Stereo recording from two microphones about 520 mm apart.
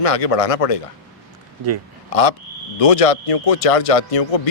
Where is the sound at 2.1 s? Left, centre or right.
Left.